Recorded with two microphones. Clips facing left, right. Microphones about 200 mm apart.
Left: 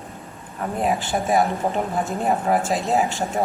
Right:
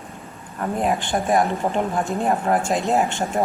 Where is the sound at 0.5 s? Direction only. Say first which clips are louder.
Right 1 dB; centre (ahead or behind).